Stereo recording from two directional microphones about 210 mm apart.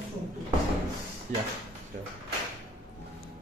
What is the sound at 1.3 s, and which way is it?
Speech, 35° right (ahead or behind).